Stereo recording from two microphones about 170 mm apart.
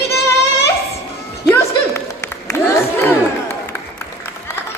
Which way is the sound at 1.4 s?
15° left (ahead or behind).